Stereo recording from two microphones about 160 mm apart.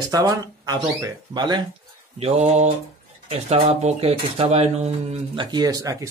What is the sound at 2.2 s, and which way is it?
Mantra, 45° right (ahead or behind).